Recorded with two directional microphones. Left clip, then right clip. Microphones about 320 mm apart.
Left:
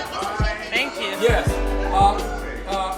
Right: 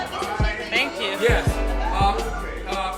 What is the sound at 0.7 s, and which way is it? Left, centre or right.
Music, centre.